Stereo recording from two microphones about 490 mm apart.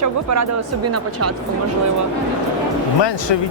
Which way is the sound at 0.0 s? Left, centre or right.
Right.